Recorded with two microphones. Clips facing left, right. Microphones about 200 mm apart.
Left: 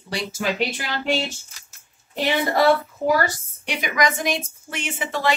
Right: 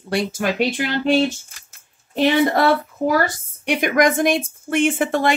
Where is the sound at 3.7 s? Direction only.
55° right (ahead or behind).